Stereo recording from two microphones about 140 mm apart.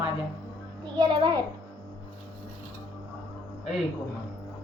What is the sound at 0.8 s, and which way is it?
Speech, 30° right (ahead or behind).